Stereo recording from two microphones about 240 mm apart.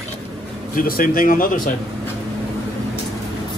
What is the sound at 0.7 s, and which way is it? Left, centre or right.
Speech, left.